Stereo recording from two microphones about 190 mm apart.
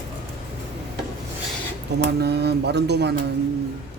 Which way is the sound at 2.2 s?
60° right (ahead or behind).